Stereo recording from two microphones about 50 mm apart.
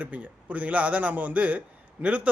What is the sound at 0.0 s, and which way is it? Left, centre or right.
A man's voice, right.